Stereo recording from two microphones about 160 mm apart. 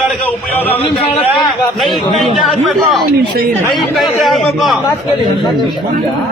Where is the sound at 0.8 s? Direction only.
40° left (ahead or behind).